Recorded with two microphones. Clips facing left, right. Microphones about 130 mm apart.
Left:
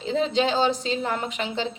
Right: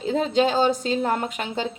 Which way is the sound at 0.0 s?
45° right (ahead or behind).